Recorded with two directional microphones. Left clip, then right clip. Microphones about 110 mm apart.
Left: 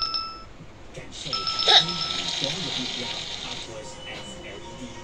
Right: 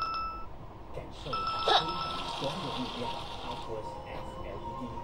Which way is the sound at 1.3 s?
30° right (ahead or behind).